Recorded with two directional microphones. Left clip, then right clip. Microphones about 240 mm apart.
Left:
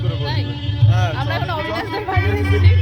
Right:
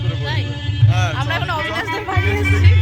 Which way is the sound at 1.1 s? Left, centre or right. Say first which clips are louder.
Right 2 dB; centre.